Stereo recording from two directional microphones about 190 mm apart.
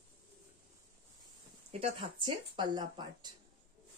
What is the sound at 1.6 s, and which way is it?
Speech, 30° right (ahead or behind).